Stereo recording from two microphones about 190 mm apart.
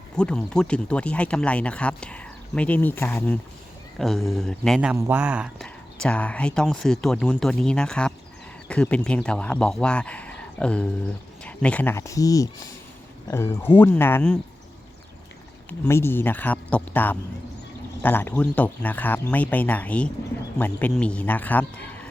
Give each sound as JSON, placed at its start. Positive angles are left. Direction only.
{"t": 0.2, "sound": "speech", "side_deg": 5}
{"t": 5.6, "sound": "speech", "side_deg": 5}
{"t": 15.9, "sound": "speech", "side_deg": 10}